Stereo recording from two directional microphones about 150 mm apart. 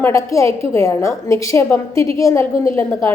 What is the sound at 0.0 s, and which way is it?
A woman's voice, 20° left (ahead or behind).